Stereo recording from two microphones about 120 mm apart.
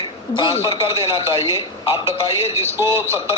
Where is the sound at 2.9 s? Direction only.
20° right (ahead or behind).